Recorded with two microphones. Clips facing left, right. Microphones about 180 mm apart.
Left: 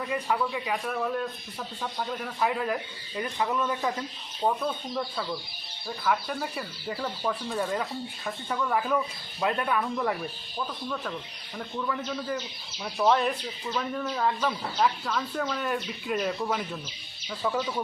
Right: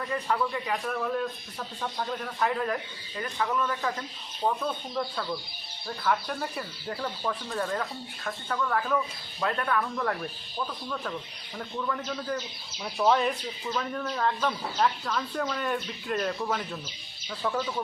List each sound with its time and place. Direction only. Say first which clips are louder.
0.1 s speech: even; 10° left (ahead or behind)
3.2 s speech: left 1 dB; 15° left (ahead or behind)
4.4 s speech: left 1 dB; 5° left (ahead or behind)
11.5 s speech: left 1 dB; centre (ahead or behind)